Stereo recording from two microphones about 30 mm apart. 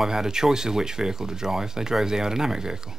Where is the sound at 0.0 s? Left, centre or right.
Centre.